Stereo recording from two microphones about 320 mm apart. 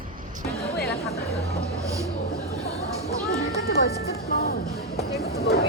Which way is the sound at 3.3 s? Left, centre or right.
Left.